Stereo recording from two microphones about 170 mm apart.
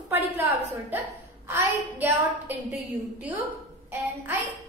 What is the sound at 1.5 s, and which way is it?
A woman's voice, 10° right (ahead or behind).